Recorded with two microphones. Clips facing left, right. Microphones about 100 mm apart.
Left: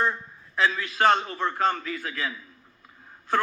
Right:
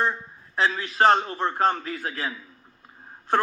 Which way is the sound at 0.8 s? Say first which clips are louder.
Right 4 dB; 35° right (ahead or behind).